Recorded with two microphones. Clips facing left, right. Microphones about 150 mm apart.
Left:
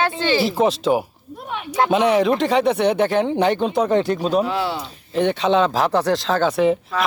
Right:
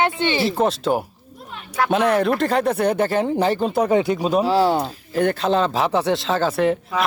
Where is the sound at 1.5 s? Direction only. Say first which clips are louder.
Left 9 dB; 75° left (ahead or behind).